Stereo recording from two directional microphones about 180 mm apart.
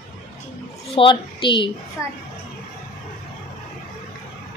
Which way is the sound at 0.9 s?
30° left (ahead or behind).